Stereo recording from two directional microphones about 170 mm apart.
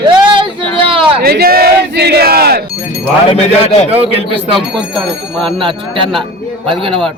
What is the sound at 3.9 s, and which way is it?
Speech, 35° right (ahead or behind).